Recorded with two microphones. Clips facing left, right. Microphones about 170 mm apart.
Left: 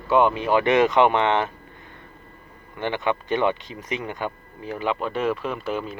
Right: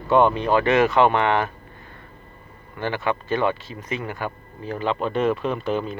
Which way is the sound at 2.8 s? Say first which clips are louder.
Even; 20° left (ahead or behind).